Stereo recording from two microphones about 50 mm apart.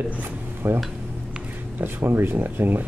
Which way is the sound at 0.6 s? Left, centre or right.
Right.